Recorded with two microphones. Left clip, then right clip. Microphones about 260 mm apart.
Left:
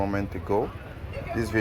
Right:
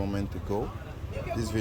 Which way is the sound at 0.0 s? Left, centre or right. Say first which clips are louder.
Left 6 dB; centre.